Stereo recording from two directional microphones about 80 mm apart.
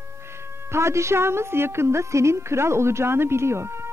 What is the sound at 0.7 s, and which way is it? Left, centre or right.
A woman's voice, right.